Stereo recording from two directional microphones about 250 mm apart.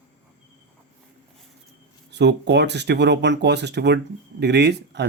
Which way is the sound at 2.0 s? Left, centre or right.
Right.